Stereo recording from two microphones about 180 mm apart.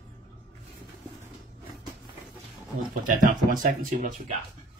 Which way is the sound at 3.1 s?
50° right (ahead or behind).